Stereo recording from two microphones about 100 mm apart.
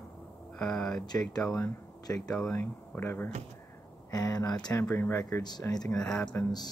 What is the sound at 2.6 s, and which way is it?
Speech, 20° left (ahead or behind).